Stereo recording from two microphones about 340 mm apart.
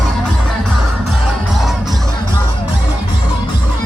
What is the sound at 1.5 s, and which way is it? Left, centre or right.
Music, centre.